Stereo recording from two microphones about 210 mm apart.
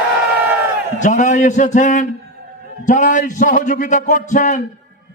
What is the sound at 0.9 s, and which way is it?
A man's voice, 35° left (ahead or behind).